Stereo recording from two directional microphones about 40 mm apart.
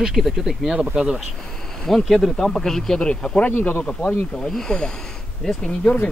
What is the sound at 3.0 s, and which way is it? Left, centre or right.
Speech, left.